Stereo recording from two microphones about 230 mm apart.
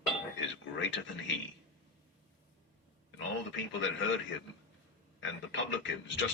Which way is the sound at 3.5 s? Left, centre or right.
Left.